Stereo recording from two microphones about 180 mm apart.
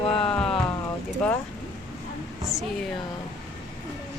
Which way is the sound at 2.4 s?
Centre (ahead or behind).